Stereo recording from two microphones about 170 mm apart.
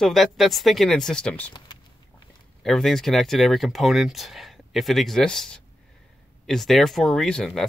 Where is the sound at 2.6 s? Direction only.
Centre (ahead or behind).